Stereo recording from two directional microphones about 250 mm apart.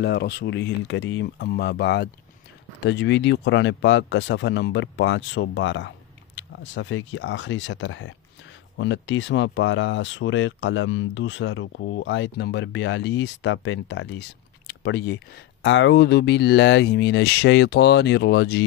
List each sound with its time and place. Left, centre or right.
0.0 s speech: left